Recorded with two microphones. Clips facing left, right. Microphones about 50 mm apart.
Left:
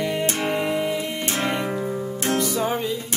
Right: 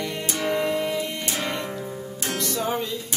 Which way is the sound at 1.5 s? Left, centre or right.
Left.